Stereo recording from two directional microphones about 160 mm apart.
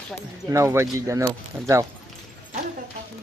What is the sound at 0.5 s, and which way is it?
Speech, 15° right (ahead or behind).